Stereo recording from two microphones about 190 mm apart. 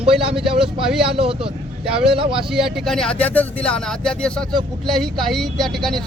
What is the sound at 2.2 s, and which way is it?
Speech, 30° right (ahead or behind).